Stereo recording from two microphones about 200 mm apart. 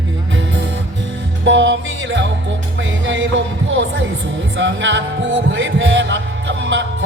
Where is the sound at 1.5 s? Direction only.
65° right (ahead or behind).